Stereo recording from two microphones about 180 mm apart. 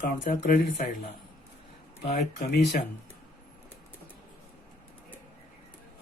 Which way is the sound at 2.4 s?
60° left (ahead or behind).